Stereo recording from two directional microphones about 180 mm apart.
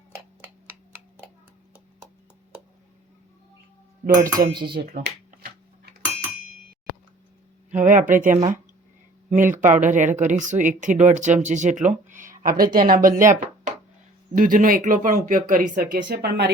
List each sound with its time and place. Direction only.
4.2 s dishes: 20° right (ahead or behind)
4.8 s finger snapping: 60° right (ahead or behind)
7.7 s speech: 45° right (ahead or behind); by 16.5 s 60° right (ahead or behind)